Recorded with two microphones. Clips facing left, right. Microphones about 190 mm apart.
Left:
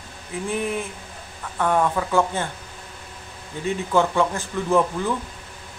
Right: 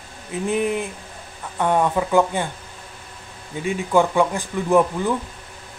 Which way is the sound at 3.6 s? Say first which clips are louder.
Right 2 dB; 15° right (ahead or behind).